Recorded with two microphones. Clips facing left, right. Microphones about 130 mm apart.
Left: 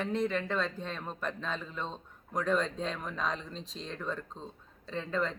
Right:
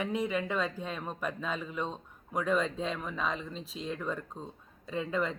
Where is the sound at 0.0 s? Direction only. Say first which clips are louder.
Even; 10° right (ahead or behind).